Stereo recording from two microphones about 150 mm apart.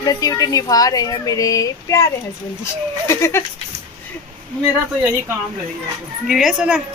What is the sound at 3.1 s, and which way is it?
Goat, 15° left (ahead or behind).